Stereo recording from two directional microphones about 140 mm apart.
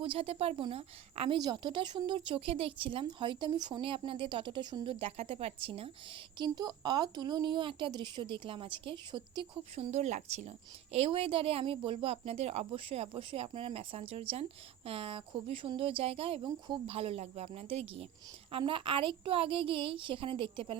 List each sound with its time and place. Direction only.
0.0 s speech: 40° right (ahead or behind)
1.4 s speech: 30° right (ahead or behind)
6.4 s speech: 30° right (ahead or behind)
9.9 s speech: 55° right (ahead or behind); by 20.7 s 40° right (ahead or behind)